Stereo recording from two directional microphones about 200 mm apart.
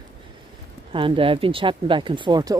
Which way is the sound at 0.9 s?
25° right (ahead or behind).